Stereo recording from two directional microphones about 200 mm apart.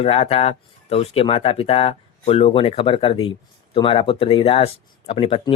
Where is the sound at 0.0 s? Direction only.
30° left (ahead or behind).